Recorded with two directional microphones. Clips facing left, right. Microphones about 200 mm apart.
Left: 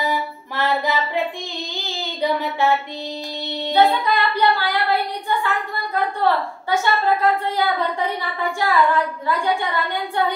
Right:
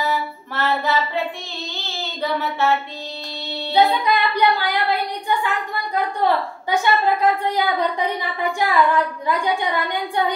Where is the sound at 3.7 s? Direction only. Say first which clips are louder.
Even; 15° right (ahead or behind).